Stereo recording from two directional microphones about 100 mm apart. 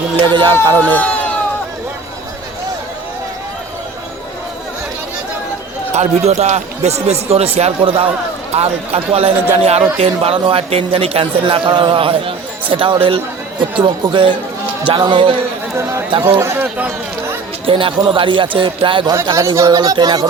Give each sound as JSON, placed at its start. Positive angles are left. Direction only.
{"t": 0.3, "sound": "speech", "side_deg": -50}
{"t": 0.8, "sound": "speech", "side_deg": 15}
{"t": 5.9, "sound": "speech", "side_deg": -90}
{"t": 7.8, "sound": "a man's voice", "side_deg": -55}
{"t": 8.5, "sound": "speech", "side_deg": -90}
{"t": 10.0, "sound": "a man's voice", "side_deg": -75}
{"t": 16.4, "sound": "speech", "side_deg": -25}
{"t": 17.7, "sound": "a man's voice", "side_deg": -60}
{"t": 19.3, "sound": "speech", "side_deg": -30}